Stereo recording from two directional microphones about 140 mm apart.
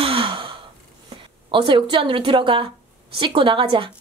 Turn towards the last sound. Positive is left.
turn(degrees=-40)  # may be behind; listen again after turning